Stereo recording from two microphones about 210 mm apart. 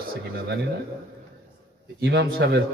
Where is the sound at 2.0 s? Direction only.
50° right (ahead or behind).